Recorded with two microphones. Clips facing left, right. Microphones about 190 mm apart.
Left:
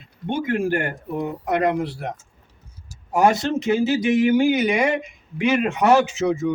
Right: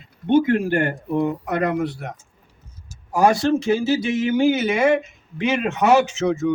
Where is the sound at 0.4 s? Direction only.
45° left (ahead or behind).